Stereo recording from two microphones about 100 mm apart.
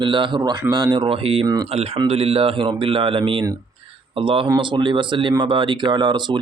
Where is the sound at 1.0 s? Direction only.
65° right (ahead or behind).